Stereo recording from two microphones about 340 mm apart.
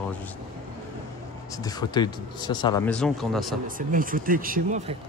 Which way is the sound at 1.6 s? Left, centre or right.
Centre.